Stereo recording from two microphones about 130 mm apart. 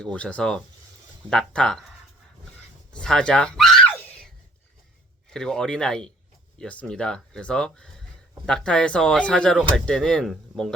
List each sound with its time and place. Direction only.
0.0 s speech: 10° left (ahead or behind)
2.9 s speech: 5° left (ahead or behind)
5.3 s speech: 5° left (ahead or behind)